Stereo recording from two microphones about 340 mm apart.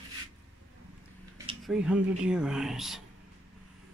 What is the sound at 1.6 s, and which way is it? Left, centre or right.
Speech, centre.